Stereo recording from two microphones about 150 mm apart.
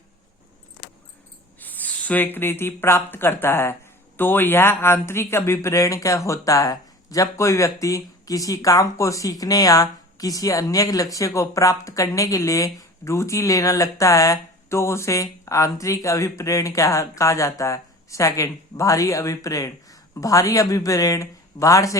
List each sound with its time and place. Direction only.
1.5 s speech: 10° left (ahead or behind)